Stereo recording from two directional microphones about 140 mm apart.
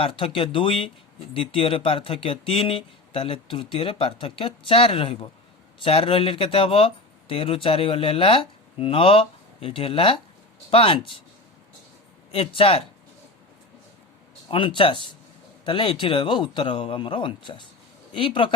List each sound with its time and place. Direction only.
0.0 s speech: 40° left (ahead or behind)
12.3 s speech: 45° left (ahead or behind)
14.4 s speech: 35° left (ahead or behind)